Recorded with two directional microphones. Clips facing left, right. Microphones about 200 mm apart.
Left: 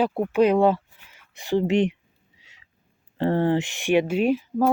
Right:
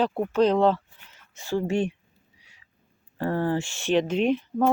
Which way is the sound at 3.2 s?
25° left (ahead or behind).